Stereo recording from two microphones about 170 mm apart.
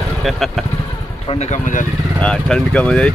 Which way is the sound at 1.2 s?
35° left (ahead or behind).